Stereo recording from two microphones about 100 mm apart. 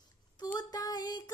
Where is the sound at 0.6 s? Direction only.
40° left (ahead or behind).